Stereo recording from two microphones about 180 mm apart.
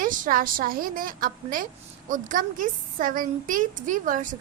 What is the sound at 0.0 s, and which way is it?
A woman's voice, 50° right (ahead or behind).